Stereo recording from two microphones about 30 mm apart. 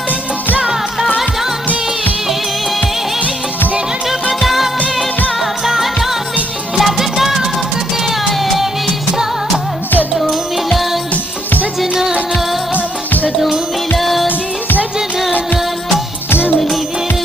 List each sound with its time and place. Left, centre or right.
4.4 s music of bollywood: centre
6.8 s music: centre
11.8 s music: centre
13.9 s music: centre